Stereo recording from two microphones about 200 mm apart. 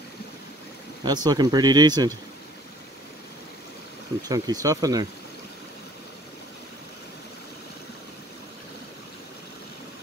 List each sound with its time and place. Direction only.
1.0 s speech: 20° right (ahead or behind)
4.3 s speech: 20° right (ahead or behind)